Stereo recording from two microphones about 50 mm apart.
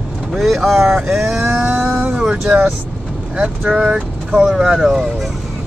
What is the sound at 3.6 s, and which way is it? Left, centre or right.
Speech, right.